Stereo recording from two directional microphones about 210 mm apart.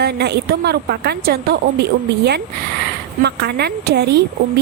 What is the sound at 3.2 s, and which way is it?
A woman's voice, 50° right (ahead or behind).